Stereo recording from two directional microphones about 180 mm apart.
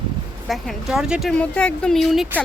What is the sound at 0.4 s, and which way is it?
Speech, centre (ahead or behind).